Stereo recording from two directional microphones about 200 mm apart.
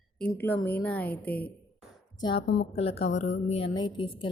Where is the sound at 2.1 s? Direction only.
20° left (ahead or behind).